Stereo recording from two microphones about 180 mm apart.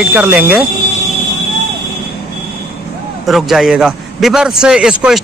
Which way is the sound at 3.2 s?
Centre (ahead or behind).